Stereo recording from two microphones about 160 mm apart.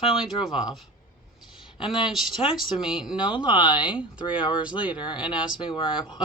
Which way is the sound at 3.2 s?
30° left (ahead or behind).